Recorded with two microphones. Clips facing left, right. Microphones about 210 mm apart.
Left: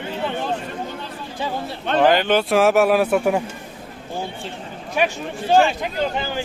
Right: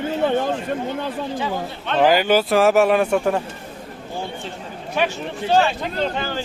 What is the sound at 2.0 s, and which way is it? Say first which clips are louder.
A man's voice: right 1 dB; 5° right (ahead or behind).